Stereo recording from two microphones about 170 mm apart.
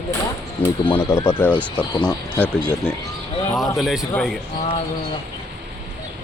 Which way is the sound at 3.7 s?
Centre (ahead or behind).